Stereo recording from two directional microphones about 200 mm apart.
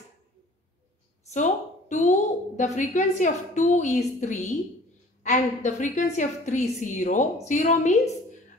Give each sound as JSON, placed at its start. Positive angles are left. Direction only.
{"t": 1.2, "sound": "a woman's voice", "side_deg": 35}